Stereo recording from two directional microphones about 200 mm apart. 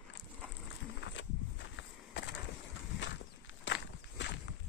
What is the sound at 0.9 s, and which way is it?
Walk, 65° left (ahead or behind).